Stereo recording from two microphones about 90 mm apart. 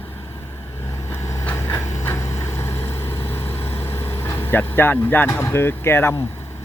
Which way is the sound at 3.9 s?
25° left (ahead or behind).